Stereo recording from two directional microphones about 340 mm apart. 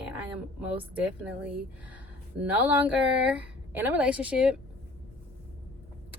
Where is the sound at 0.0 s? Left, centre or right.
Centre.